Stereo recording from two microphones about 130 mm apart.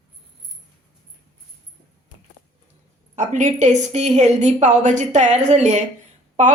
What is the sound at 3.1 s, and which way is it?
A woman's voice, 70° right (ahead or behind).